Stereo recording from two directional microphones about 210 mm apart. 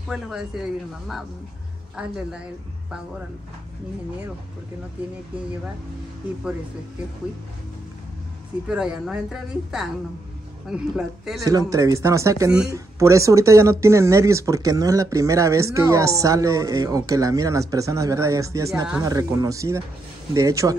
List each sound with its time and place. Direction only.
0.1 s speech: centre (ahead or behind)
2.0 s speech: 5° right (ahead or behind)
8.6 s speech: 5° right (ahead or behind)
11.4 s speech: 15° right (ahead or behind)